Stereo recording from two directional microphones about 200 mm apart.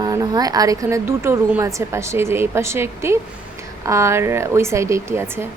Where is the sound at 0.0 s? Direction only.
20° right (ahead or behind).